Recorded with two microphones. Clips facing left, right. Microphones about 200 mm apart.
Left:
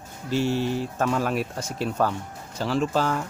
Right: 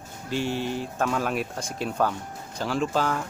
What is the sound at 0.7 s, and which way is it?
Speech, 5° left (ahead or behind).